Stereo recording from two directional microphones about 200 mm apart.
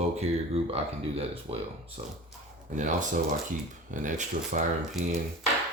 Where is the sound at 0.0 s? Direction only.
30° right (ahead or behind).